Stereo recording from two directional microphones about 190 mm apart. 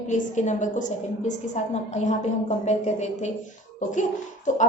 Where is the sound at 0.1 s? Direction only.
40° left (ahead or behind).